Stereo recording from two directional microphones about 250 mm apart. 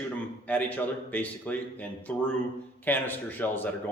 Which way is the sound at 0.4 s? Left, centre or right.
Centre.